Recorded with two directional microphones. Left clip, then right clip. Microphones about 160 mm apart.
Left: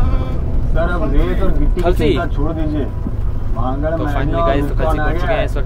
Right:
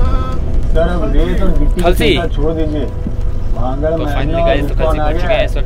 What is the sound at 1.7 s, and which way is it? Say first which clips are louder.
Speech: right 4 dB; 10° left (ahead or behind).